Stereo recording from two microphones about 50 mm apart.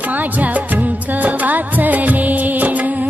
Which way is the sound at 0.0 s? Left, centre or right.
Right.